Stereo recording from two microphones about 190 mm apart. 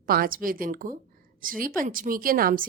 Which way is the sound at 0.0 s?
50° right (ahead or behind).